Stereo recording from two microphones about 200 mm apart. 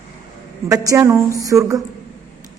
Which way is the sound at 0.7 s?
15° right (ahead or behind).